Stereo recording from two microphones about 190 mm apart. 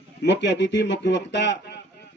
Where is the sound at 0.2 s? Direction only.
65° left (ahead or behind).